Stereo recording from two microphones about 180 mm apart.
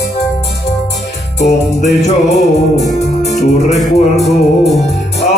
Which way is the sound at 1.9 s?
40° left (ahead or behind).